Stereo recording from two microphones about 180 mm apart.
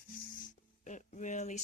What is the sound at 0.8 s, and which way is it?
Speech, 45° left (ahead or behind).